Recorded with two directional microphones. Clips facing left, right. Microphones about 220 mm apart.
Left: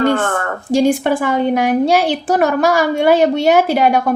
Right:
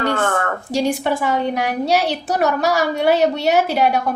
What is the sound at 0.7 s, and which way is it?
A woman's voice, 50° left (ahead or behind).